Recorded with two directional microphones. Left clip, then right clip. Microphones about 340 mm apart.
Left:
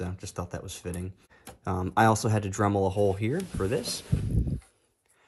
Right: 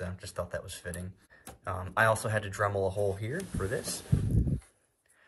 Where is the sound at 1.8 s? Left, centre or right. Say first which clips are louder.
Left 3 dB; centre.